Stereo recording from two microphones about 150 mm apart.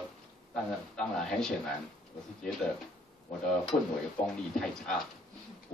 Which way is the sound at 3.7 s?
40° left (ahead or behind).